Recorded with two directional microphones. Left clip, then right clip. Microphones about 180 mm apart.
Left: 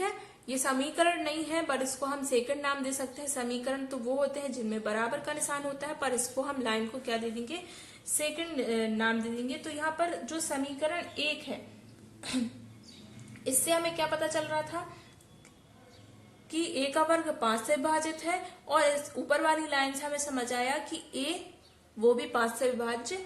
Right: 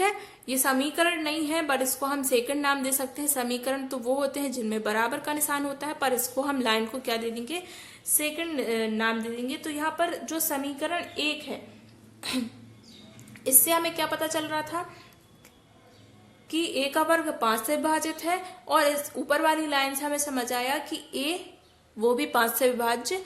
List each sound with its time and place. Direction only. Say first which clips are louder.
0.0 s a woman's voice: right 8 dB; 25° right (ahead or behind)
13.4 s a woman's voice: right 4 dB; 35° right (ahead or behind)
16.5 s a woman's voice: right 4 dB; 30° right (ahead or behind)